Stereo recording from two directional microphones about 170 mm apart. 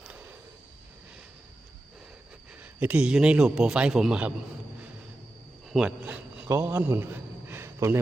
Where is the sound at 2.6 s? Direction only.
10° right (ahead or behind).